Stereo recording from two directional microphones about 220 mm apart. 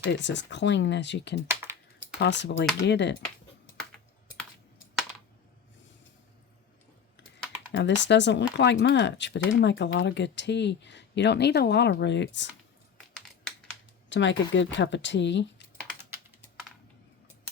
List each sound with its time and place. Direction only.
0.0 s speech: 55° left (ahead or behind)
1.5 s typing: 10° right (ahead or behind)
2.1 s speech: 50° left (ahead or behind)
7.8 s speech: 55° left (ahead or behind)
14.1 s speech: 55° left (ahead or behind)